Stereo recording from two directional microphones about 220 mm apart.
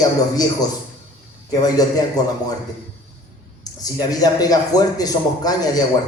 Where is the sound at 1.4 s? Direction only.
15° left (ahead or behind).